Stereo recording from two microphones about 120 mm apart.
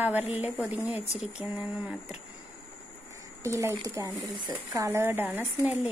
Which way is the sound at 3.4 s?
20° right (ahead or behind).